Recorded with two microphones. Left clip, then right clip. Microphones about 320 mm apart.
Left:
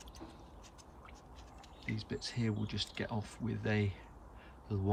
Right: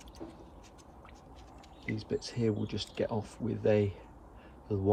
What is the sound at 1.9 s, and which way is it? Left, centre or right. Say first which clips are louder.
Speech: right 4 dB; centre.